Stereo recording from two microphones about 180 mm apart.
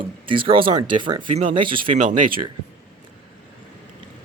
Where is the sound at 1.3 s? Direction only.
40° right (ahead or behind).